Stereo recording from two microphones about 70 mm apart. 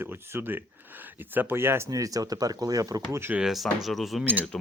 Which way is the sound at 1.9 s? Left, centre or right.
Right.